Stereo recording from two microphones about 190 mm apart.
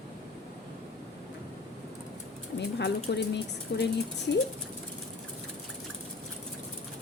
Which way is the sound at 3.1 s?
60° left (ahead or behind).